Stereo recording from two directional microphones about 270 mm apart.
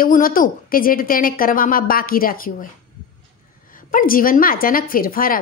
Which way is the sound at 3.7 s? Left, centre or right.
Left.